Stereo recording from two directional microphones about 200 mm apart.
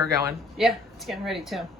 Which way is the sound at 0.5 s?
Centre (ahead or behind).